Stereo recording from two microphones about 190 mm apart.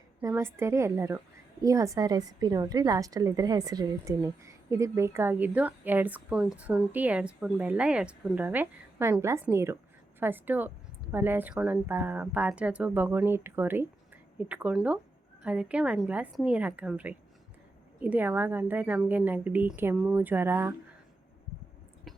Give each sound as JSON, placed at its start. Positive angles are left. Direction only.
{"t": 0.2, "sound": "a woman's voice", "side_deg": -15}